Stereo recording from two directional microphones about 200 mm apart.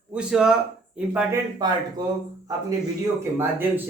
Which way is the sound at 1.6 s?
20° right (ahead or behind).